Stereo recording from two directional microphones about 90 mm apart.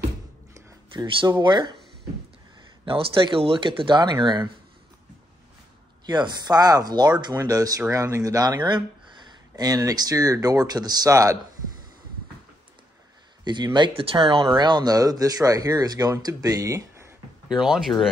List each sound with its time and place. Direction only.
1.2 s speech: 55° right (ahead or behind)
2.8 s speech: 70° right (ahead or behind)
6.0 s speech: 55° right (ahead or behind)
8.6 s speech: 55° right (ahead or behind); by 11.3 s 40° right (ahead or behind)
13.4 s speech: 55° right (ahead or behind); by 14.6 s 80° right
14.6 s speech: 55° right (ahead or behind); by 17.1 s 35° right (ahead or behind)
17.5 s speech: 5° right (ahead or behind)